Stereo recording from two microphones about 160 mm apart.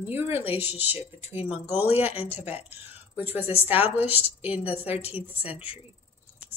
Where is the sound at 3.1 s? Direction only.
10° right (ahead or behind).